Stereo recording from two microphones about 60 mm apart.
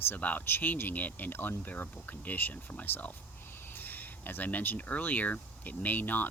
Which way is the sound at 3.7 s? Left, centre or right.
Left.